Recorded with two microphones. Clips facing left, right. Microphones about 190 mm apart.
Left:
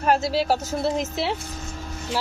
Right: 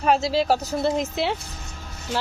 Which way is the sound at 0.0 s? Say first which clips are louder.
Right 1 dB; centre (ahead or behind).